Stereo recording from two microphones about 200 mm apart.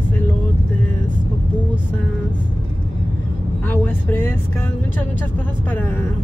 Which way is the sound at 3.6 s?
10° left (ahead or behind).